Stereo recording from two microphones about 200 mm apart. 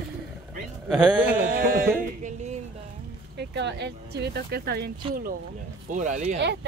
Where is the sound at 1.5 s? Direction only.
45° right (ahead or behind).